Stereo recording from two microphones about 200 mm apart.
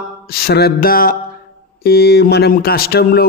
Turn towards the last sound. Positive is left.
turn(degrees=50)  # may be behind; listen again after turning